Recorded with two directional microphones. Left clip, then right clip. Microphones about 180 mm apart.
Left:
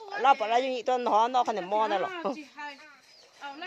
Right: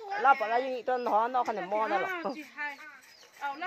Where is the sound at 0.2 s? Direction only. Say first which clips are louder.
Left 2 dB; 30° left (ahead or behind).